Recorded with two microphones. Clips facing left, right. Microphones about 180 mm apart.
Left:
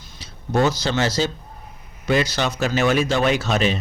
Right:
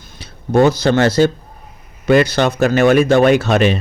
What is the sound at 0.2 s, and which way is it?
Speech, 60° right (ahead or behind).